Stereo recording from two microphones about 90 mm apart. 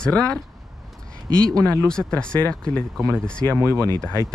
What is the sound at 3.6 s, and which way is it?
Speech, 30° right (ahead or behind).